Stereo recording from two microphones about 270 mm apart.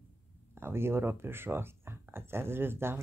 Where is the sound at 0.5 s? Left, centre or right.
Centre.